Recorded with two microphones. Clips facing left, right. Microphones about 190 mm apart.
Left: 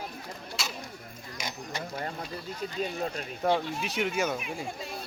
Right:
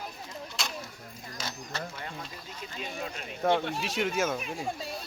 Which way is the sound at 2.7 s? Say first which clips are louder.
Left 5 dB; 40° left (ahead or behind).